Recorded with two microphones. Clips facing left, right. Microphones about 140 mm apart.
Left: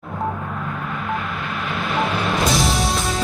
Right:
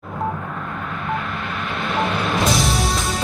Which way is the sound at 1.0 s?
Centre (ahead or behind).